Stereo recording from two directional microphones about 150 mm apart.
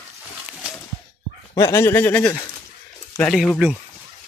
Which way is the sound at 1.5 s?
20° left (ahead or behind).